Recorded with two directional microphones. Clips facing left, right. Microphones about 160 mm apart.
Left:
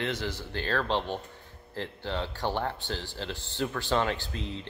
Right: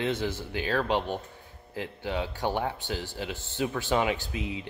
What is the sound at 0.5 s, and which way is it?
Speech, 10° right (ahead or behind).